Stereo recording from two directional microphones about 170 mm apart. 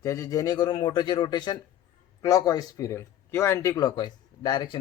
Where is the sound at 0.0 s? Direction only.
20° left (ahead or behind).